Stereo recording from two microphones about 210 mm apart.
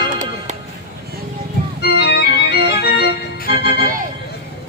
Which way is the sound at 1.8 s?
50° left (ahead or behind).